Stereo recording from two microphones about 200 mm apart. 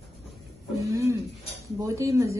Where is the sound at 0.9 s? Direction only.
15° right (ahead or behind).